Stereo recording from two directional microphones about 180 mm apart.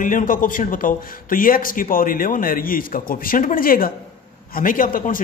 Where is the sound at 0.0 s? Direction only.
50° left (ahead or behind).